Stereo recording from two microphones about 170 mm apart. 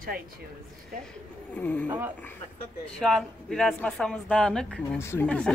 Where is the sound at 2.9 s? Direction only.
Centre (ahead or behind).